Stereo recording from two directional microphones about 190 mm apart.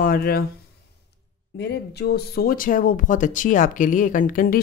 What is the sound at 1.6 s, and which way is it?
Speech, 60° left (ahead or behind).